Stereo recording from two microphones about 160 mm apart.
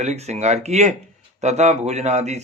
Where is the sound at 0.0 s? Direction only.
45° right (ahead or behind).